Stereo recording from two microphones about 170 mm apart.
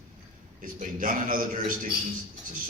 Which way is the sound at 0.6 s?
50° right (ahead or behind).